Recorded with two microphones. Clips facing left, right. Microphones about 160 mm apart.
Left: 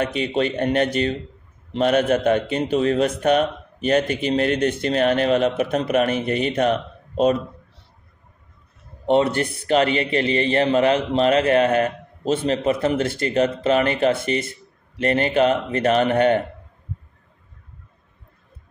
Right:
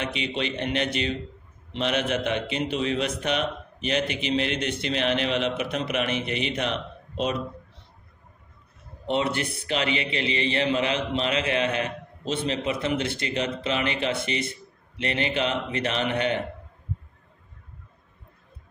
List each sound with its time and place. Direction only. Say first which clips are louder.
0.0 s a man's voice: left 7 dB; 45° left (ahead or behind)
9.0 s a man's voice: left 7 dB; 45° left (ahead or behind)